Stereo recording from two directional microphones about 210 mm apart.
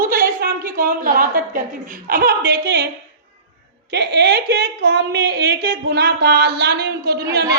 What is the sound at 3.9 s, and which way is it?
Speech, 55° right (ahead or behind).